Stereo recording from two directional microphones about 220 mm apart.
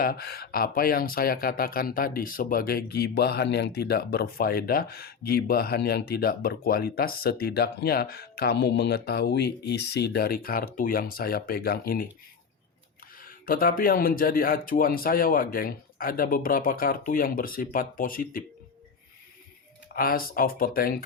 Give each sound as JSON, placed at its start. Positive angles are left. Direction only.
{"t": 0.0, "sound": "speech", "side_deg": 45}
{"t": 13.1, "sound": "speech", "side_deg": 40}
{"t": 20.0, "sound": "speech", "side_deg": 40}